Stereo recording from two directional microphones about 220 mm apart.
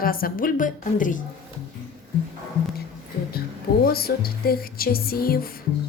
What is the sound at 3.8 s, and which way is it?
Speech, 45° left (ahead or behind).